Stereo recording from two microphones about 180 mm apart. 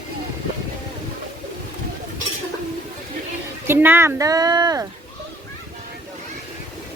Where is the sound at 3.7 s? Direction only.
10° right (ahead or behind).